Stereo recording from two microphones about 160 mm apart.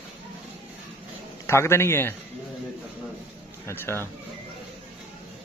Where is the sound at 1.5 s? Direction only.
15° left (ahead or behind).